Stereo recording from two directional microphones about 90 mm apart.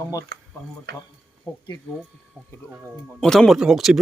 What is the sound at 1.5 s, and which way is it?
Speech, 50° left (ahead or behind).